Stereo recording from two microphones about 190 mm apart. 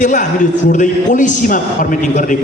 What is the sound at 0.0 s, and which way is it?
A man's voice, 40° left (ahead or behind).